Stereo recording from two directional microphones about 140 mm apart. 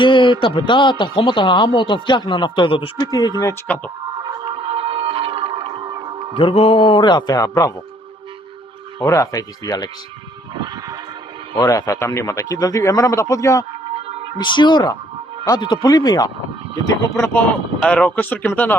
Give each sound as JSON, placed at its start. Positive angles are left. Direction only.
{"t": 0.0, "sound": "a man's voice", "side_deg": 35}
{"t": 3.1, "sound": "speech", "side_deg": 25}
{"t": 3.7, "sound": "speech", "side_deg": 10}
{"t": 4.2, "sound": "a sound", "side_deg": -40}
{"t": 6.3, "sound": "speech", "side_deg": 45}
{"t": 9.0, "sound": "speech", "side_deg": 20}
{"t": 10.6, "sound": "music", "side_deg": -25}
{"t": 11.7, "sound": "speech", "side_deg": 25}
{"t": 14.3, "sound": "speech", "side_deg": 35}